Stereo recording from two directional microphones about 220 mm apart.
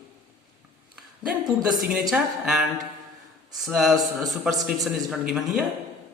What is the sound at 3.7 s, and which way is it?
A woman's voice, centre (ahead or behind).